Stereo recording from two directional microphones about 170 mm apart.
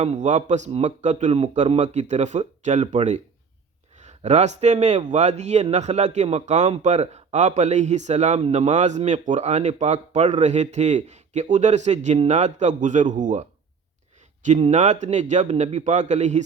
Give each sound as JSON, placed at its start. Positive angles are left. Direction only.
{"t": 0.0, "sound": "a man's voice", "side_deg": -45}
{"t": 14.4, "sound": "a man's voice", "side_deg": -45}